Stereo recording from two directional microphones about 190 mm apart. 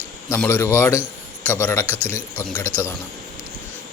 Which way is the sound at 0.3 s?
15° left (ahead or behind).